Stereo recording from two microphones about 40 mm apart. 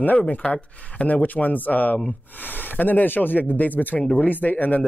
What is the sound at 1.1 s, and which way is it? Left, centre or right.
Speech, left.